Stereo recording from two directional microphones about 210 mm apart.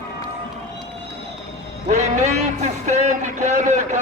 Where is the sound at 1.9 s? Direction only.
35° right (ahead or behind).